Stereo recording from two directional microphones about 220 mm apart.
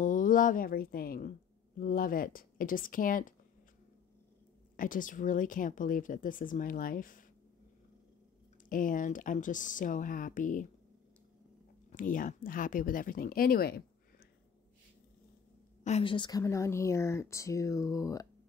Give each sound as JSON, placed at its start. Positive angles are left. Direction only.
{"t": 0.0, "sound": "speech", "side_deg": 35}
{"t": 4.7, "sound": "speech", "side_deg": 40}
{"t": 8.6, "sound": "speech", "side_deg": 35}
{"t": 11.9, "sound": "speech", "side_deg": 40}
{"t": 15.8, "sound": "speech", "side_deg": 25}